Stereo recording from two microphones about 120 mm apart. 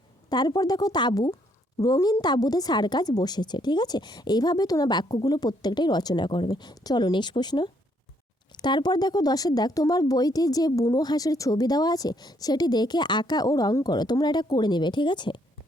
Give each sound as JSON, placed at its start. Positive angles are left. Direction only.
{"t": 0.3, "sound": "speech", "side_deg": 35}